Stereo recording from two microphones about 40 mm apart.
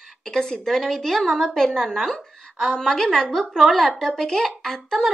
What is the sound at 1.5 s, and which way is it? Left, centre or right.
Speech, centre.